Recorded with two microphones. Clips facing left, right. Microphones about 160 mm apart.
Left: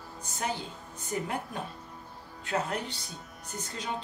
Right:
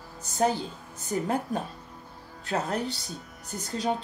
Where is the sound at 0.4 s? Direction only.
40° right (ahead or behind).